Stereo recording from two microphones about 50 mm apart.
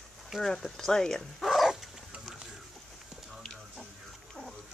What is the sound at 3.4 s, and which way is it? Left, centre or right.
Music, centre.